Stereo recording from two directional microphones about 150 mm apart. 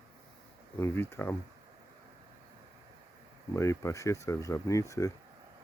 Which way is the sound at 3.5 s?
20° left (ahead or behind).